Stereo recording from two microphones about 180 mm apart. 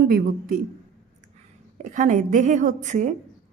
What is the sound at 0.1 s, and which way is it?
Speech, 55° right (ahead or behind).